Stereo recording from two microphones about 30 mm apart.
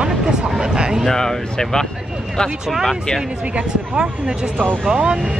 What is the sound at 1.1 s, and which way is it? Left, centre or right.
Speech, centre.